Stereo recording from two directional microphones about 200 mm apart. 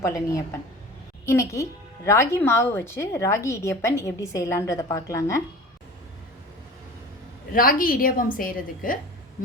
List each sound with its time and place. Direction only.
0.0 s a woman's voice: 15° left (ahead or behind)
7.5 s a woman's voice: 45° left (ahead or behind)